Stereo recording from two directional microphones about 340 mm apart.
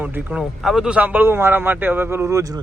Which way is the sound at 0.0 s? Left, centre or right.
Centre.